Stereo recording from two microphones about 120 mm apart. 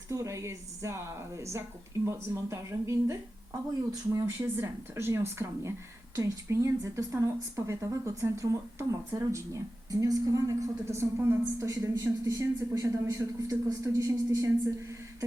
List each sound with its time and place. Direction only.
0.1 s speech: 25° right (ahead or behind)
4.3 s speech: 20° right (ahead or behind)